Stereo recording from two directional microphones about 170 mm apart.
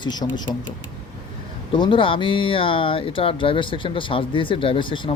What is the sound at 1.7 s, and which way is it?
Speech, 30° left (ahead or behind).